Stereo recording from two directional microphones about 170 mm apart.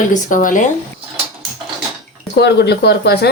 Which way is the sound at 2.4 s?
75° left (ahead or behind).